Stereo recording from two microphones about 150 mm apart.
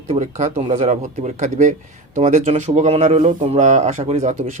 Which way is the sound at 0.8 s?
50° right (ahead or behind).